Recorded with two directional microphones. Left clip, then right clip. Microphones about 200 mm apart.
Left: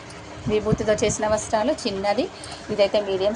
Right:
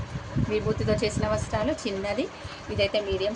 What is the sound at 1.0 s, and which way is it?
A woman's voice, 5° right (ahead or behind).